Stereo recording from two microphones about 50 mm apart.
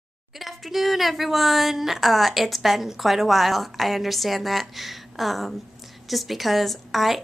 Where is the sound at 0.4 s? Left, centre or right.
Centre.